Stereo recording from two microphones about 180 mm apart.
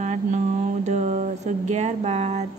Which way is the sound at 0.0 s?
40° right (ahead or behind).